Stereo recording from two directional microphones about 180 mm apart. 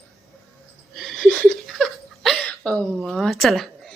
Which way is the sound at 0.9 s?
Centre (ahead or behind).